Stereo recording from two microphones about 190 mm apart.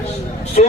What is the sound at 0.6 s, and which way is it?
Vehicle, 40° left (ahead or behind).